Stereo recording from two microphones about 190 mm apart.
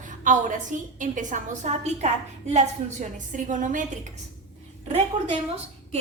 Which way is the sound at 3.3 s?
40° right (ahead or behind).